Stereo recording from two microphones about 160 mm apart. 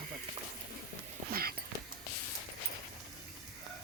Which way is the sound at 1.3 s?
70° right (ahead or behind).